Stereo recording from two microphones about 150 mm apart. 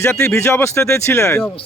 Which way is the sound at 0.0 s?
15° left (ahead or behind).